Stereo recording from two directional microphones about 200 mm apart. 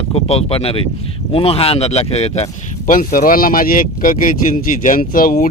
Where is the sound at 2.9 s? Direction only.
45° left (ahead or behind).